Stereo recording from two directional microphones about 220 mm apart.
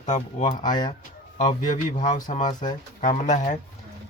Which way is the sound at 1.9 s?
35° left (ahead or behind).